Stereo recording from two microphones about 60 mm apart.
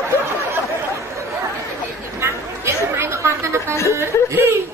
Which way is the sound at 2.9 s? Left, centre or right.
Right.